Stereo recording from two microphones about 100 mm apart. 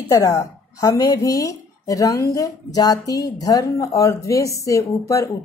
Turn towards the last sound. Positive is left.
turn(degrees=30)  # may be behind; listen again after turning